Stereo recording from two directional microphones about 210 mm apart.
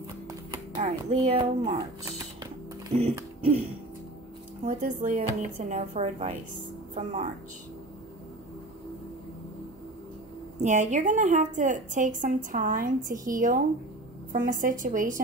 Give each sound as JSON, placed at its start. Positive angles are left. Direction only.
{"t": 0.3, "sound": "a sound", "side_deg": -20}
{"t": 0.8, "sound": "a woman's voice", "side_deg": -35}
{"t": 1.4, "sound": "music", "side_deg": -20}
{"t": 4.6, "sound": "a woman's voice", "side_deg": -35}
{"t": 10.6, "sound": "a woman's voice", "side_deg": -35}